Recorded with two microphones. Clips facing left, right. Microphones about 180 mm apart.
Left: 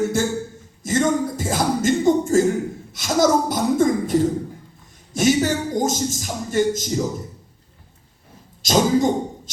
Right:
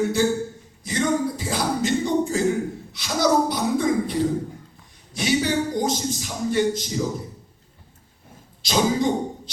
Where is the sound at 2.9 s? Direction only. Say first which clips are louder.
Left 3 dB; 45° left (ahead or behind).